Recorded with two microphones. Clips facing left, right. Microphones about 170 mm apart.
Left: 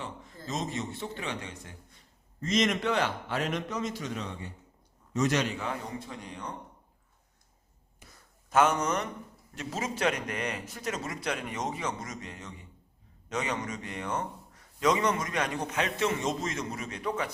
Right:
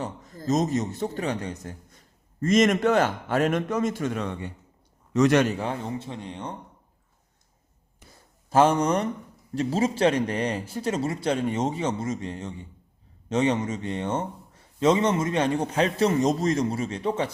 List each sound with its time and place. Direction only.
0.0 s a man's voice: 40° right (ahead or behind); by 5.5 s 65° right (ahead or behind)
5.5 s a man's voice: 35° right (ahead or behind)
8.4 s a man's voice: 30° right (ahead or behind)